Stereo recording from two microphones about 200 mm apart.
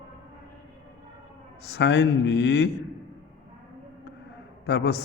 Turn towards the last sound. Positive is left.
turn(degrees=60)  # may be behind; listen again after turning